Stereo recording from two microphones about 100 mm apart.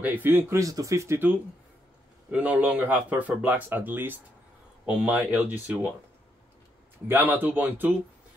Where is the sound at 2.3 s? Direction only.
15° right (ahead or behind).